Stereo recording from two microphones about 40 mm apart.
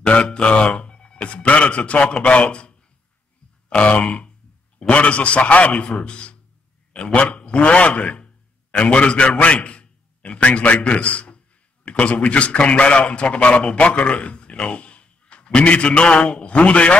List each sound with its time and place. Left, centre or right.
0.0 s speech: left
3.6 s grunt: left
4.7 s a man's voice: left
6.0 s grunt: left
7.2 s a man's voice: left